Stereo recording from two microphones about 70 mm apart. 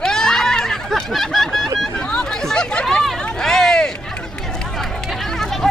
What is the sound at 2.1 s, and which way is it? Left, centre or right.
Chatter, centre.